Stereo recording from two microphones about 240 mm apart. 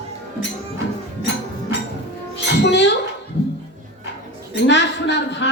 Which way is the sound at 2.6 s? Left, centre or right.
Left.